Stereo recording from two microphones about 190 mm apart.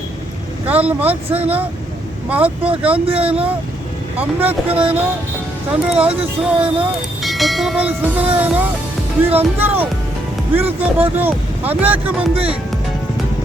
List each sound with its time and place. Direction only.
0.7 s speech: 10° right (ahead or behind)
3.2 s speech: 30° right (ahead or behind)
4.2 s speech: 10° right (ahead or behind)